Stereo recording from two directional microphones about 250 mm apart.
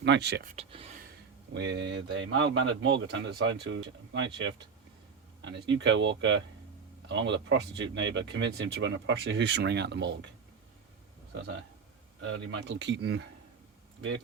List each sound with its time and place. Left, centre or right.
0.0 s speech: right
0.5 s speech: right
1.5 s speech: right
5.5 s speech: right
12.2 s speech: right